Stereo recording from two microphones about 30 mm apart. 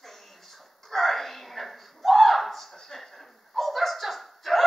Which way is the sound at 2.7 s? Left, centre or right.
Centre.